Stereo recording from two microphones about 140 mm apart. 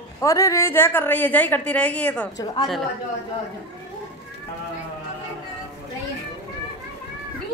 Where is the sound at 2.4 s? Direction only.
25° left (ahead or behind).